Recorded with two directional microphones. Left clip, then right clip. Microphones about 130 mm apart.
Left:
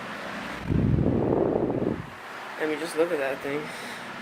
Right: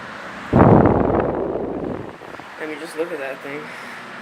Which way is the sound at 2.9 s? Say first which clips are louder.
Even; 35° left (ahead or behind).